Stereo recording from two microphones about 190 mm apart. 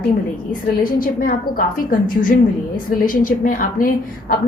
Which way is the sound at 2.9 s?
45° left (ahead or behind).